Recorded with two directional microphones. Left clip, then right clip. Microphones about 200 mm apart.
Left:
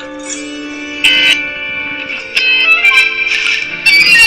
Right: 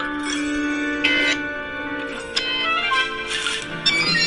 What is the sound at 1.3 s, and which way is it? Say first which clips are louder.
Music: left 9 dB; 20° right (ahead or behind).